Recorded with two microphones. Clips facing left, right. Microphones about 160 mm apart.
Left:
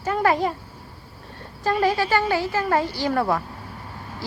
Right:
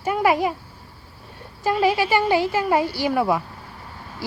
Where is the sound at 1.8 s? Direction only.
10° right (ahead or behind).